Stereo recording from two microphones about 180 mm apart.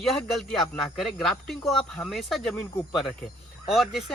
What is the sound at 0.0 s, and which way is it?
Speech, centre (ahead or behind).